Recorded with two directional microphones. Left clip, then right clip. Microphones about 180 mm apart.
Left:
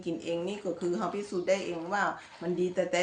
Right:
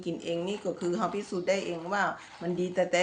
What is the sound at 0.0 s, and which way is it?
Speech, 30° right (ahead or behind).